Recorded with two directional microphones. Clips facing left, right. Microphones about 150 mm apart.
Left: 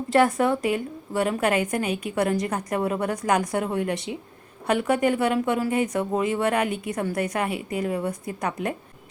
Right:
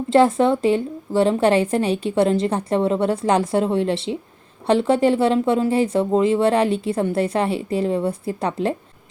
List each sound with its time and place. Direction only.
0.1 s a woman's voice: 25° right (ahead or behind)